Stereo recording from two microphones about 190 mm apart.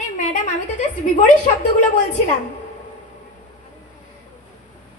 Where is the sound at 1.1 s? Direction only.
40° left (ahead or behind).